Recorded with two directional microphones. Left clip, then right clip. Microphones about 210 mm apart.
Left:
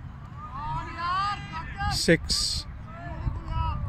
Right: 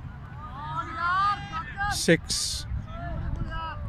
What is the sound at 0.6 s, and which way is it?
Vehicle, 50° left (ahead or behind).